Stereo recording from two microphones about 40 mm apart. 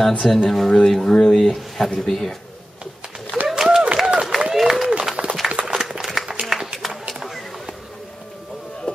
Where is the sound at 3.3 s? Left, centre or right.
Right.